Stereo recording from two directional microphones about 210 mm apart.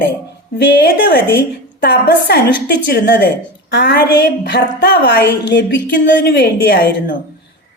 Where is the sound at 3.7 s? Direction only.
50° left (ahead or behind).